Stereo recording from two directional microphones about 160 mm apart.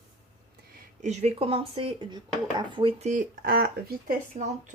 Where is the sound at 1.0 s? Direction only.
45° right (ahead or behind).